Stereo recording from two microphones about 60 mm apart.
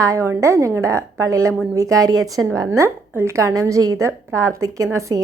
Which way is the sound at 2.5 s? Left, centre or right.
Right.